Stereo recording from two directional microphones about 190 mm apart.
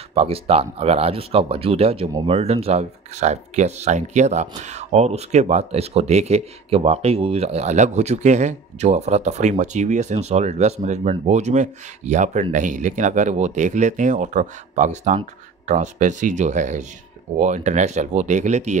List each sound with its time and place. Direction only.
0.1 s speech: 30° right (ahead or behind)